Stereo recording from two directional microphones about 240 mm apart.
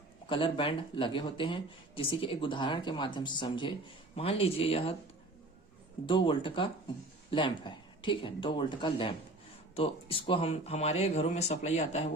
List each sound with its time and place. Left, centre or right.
0.3 s speech: left
6.1 s speech: left